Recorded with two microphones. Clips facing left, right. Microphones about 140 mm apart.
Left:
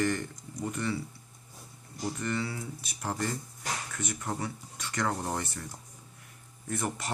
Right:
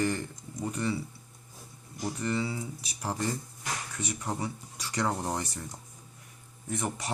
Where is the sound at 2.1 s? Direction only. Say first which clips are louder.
Right 4 dB; 15° right (ahead or behind).